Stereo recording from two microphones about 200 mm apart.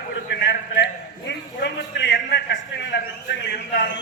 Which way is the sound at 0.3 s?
60° left (ahead or behind).